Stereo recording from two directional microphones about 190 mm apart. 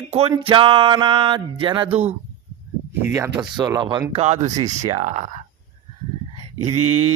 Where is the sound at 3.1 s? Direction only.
15° right (ahead or behind).